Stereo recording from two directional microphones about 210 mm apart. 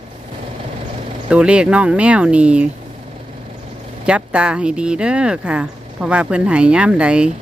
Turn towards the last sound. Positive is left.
turn(degrees=-5)  # may be behind; listen again after turning